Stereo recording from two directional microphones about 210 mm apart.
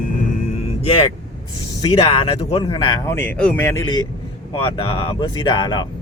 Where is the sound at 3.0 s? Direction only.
10° left (ahead or behind).